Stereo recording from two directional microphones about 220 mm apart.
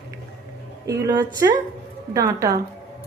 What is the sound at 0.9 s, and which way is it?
A woman's voice, 15° right (ahead or behind).